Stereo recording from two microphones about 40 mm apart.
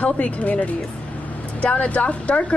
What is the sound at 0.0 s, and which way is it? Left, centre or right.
A woman's voice, left.